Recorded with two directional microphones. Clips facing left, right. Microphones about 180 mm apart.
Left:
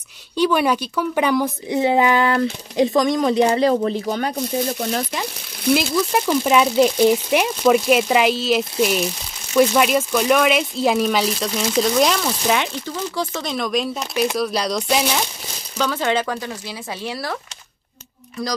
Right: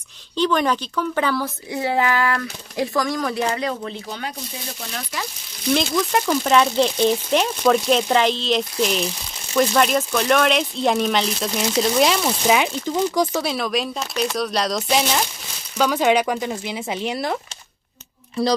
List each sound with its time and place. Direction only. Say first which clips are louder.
0.4 s a woman's voice: left 2 dB; 10° left (ahead or behind)
3.4 s speech: left 8 dB; 35° left (ahead or behind)
5.7 s speech: left 2 dB; 5° left (ahead or behind)
15.8 s speech: right 3 dB; 15° right (ahead or behind)
18.4 s speech: right 6 dB; 30° right (ahead or behind)